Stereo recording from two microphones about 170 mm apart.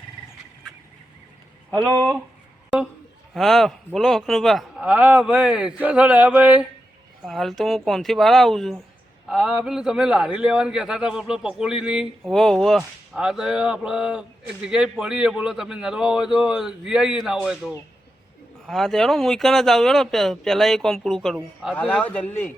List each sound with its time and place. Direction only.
3.3 s a man's voice: centre (ahead or behind)
21.8 s a man's voice: 10° left (ahead or behind)